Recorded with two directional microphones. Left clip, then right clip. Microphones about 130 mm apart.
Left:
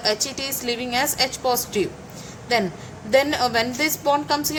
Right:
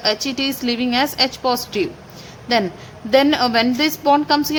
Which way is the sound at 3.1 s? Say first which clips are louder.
Right 4 dB; 35° right (ahead or behind).